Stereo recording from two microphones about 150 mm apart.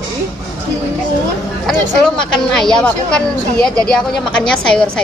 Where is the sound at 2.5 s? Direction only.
5° left (ahead or behind).